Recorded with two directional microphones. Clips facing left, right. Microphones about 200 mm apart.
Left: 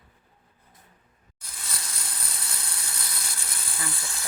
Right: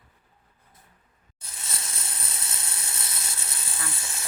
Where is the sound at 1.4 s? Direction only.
25° right (ahead or behind).